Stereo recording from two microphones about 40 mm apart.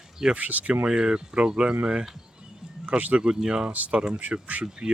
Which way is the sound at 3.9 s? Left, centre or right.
Right.